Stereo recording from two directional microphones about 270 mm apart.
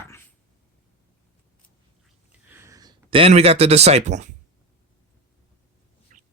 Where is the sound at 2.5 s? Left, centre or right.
Centre.